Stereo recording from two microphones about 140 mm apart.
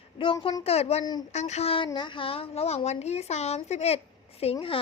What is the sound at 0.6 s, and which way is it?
A woman's voice, 45° left (ahead or behind).